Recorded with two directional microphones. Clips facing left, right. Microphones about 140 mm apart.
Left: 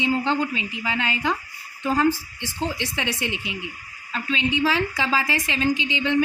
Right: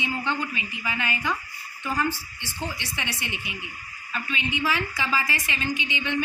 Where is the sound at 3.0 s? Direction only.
90° left.